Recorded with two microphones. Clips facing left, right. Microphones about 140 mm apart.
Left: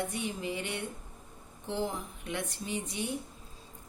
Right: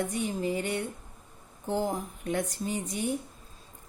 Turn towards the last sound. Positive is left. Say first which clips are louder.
# right 4 dB
turn(degrees=-45)  # may be behind; listen again after turning